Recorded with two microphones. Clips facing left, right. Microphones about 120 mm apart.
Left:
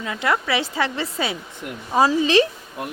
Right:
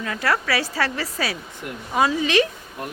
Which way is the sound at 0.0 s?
20° left (ahead or behind).